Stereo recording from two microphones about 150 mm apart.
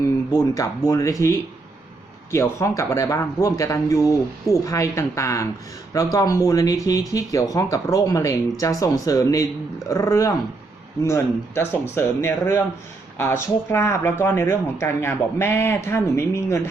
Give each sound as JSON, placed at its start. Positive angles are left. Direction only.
{"t": 0.3, "sound": "speech", "side_deg": 25}